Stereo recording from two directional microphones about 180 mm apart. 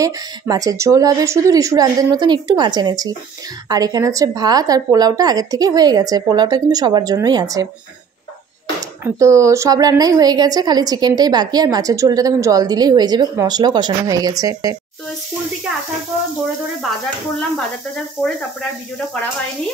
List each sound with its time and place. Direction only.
0.0 s a woman's voice: 20° right (ahead or behind)
9.0 s a woman's voice: 15° right (ahead or behind)